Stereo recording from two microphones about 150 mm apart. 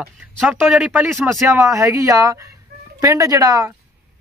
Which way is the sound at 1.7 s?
20° right (ahead or behind).